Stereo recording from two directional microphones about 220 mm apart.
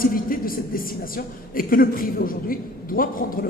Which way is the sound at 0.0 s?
40° left (ahead or behind).